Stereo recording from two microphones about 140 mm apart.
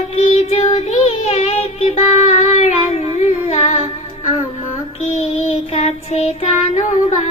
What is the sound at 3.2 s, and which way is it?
Humming, 50° left (ahead or behind).